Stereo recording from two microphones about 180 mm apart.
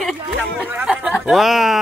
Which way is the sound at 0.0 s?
Centre (ahead or behind).